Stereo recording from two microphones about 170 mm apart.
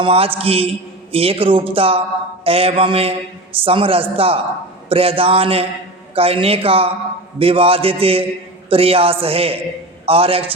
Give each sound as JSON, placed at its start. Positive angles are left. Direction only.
{"t": 0.0, "sound": "a man's voice", "side_deg": -35}